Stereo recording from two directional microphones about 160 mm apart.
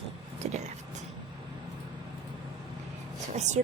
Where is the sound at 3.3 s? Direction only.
45° right (ahead or behind).